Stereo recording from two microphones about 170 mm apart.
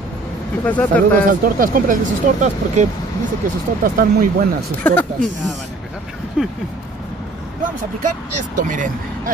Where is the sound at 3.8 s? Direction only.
55° right (ahead or behind).